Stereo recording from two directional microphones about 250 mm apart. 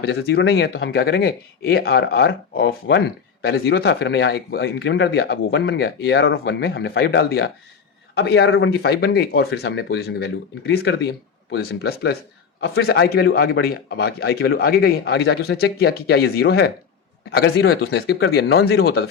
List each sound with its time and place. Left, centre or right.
0.0 s a man's voice: left